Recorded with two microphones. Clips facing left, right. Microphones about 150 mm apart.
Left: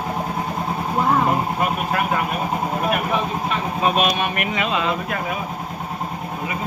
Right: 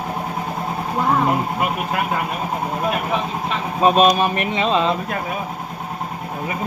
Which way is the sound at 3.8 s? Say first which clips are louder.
Right 6 dB; 35° right (ahead or behind).